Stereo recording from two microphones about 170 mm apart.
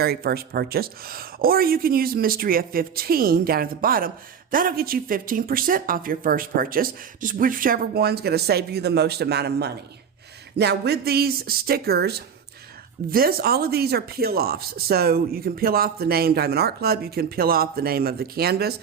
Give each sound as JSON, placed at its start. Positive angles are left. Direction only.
{"t": 0.0, "sound": "speech", "side_deg": -65}